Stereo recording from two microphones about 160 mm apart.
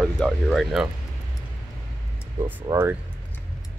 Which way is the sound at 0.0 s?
Centre (ahead or behind).